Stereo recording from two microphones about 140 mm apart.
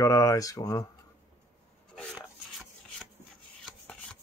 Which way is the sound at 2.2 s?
5° right (ahead or behind).